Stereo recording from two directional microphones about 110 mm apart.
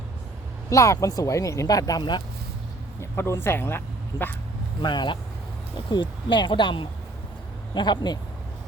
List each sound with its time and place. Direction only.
0.7 s speech: 30° left (ahead or behind)
3.0 s speech: 25° left (ahead or behind)
4.8 s speech: 45° left (ahead or behind)